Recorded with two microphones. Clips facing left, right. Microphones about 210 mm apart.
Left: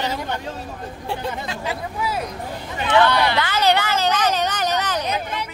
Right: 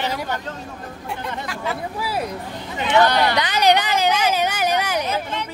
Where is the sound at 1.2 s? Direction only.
20° left (ahead or behind).